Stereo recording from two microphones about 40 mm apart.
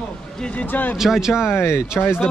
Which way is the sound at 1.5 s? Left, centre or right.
Left.